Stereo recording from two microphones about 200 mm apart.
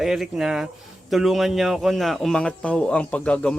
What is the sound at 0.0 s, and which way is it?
Speech, centre (ahead or behind).